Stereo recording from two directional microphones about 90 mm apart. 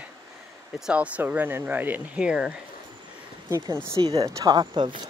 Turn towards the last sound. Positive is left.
turn(degrees=-55)  # may be behind; listen again after turning